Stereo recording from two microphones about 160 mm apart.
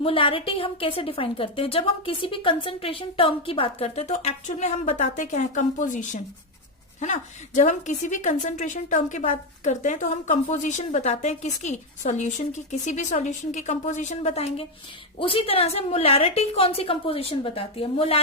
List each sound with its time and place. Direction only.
0.0 s a woman's voice: 35° left (ahead or behind)